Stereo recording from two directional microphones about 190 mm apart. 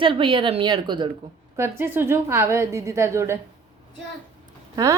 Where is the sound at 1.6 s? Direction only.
10° right (ahead or behind).